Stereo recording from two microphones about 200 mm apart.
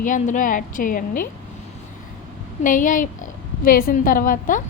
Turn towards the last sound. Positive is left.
turn(degrees=40)  # may be behind; listen again after turning